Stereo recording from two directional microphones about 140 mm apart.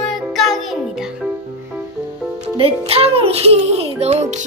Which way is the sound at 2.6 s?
45° right (ahead or behind).